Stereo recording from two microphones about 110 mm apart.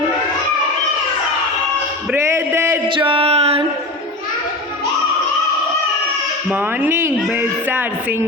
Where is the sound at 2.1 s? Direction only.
25° right (ahead or behind).